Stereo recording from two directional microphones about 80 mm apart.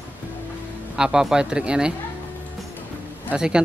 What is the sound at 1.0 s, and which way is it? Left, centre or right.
Speech, centre.